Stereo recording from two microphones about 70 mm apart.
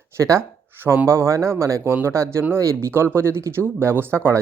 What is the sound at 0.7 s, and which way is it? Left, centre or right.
Speech, right.